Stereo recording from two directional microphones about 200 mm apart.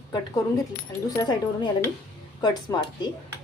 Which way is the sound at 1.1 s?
20° left (ahead or behind).